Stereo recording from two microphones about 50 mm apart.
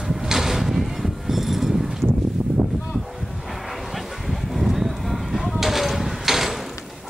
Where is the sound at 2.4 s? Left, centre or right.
Right.